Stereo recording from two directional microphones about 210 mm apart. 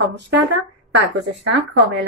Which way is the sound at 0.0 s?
55° right (ahead or behind).